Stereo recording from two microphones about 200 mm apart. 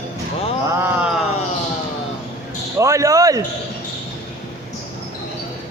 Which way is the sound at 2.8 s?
15° right (ahead or behind).